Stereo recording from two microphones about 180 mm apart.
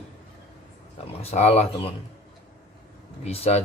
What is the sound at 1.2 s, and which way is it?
Speech, 35° left (ahead or behind).